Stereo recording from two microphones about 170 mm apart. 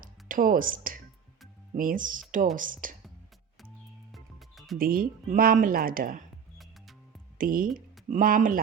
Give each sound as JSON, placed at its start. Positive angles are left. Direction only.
{"t": 0.0, "sound": "music", "side_deg": -55}
{"t": 1.7, "sound": "speech", "side_deg": -55}
{"t": 4.1, "sound": "music", "side_deg": 0}
{"t": 4.8, "sound": "speech", "side_deg": -55}
{"t": 7.3, "sound": "speech", "side_deg": -55}